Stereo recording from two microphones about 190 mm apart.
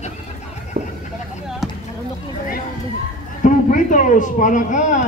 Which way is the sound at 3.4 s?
45° left (ahead or behind).